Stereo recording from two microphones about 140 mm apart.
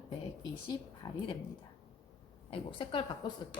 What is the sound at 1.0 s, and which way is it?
Speech, 30° left (ahead or behind).